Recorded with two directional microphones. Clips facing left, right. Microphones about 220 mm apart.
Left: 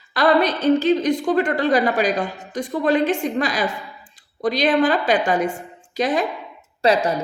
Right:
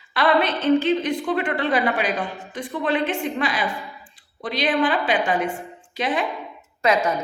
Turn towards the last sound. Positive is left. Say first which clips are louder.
# left 2 dB
turn(degrees=35)  # may be behind; listen again after turning